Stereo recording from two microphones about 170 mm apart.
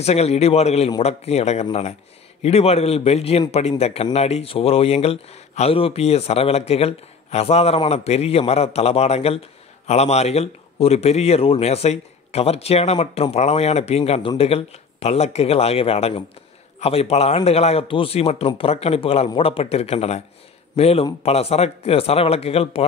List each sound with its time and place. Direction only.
0.0 s a man's voice: 40° left (ahead or behind)